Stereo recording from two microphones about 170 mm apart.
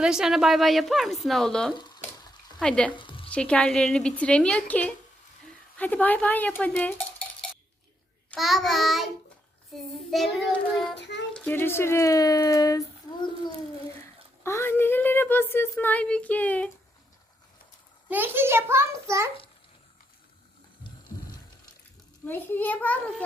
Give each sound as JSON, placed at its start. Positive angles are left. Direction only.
{"t": 0.0, "sound": "a woman's voice", "side_deg": -5}
{"t": 2.9, "sound": "a sound", "side_deg": 30}
{"t": 3.3, "sound": "a woman's voice", "side_deg": 5}
{"t": 8.3, "sound": "a woman's voice", "side_deg": 0}
{"t": 14.4, "sound": "a woman's voice", "side_deg": 15}
{"t": 18.1, "sound": "a child's voice", "side_deg": -10}
{"t": 22.3, "sound": "a woman's voice", "side_deg": 10}